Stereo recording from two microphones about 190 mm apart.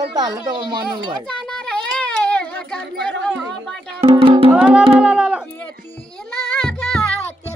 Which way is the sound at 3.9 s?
30° right (ahead or behind).